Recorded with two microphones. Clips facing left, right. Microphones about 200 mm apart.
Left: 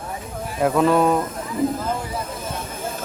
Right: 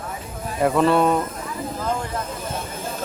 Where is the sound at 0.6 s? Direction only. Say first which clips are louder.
Even; 5° left (ahead or behind).